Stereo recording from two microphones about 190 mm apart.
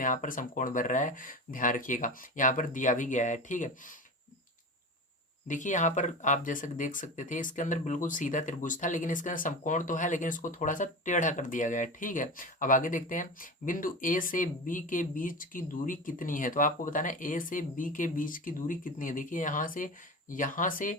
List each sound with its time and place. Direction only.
0.0 s speech: 45° left (ahead or behind)
5.5 s speech: 40° left (ahead or behind)